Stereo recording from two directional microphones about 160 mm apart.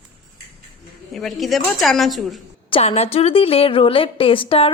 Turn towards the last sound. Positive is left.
turn(degrees=35)  # may be behind; listen again after turning